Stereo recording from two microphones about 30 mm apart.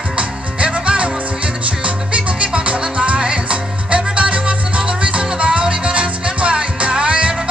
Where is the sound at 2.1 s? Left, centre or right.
Right.